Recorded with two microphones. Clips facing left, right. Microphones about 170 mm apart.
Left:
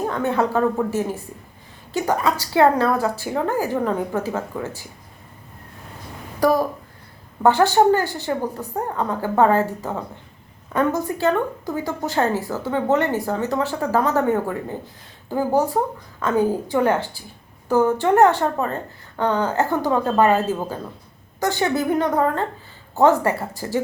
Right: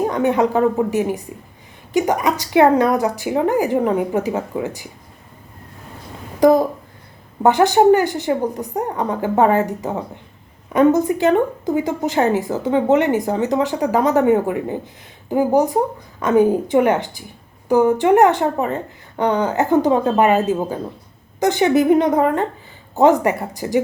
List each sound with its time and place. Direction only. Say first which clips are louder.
0.0 s a woman's voice: right 4 dB; 15° right (ahead or behind)
6.4 s a sound: right 5 dB; 20° right (ahead or behind)
7.4 s a woman's voice: right 3 dB; 15° right (ahead or behind)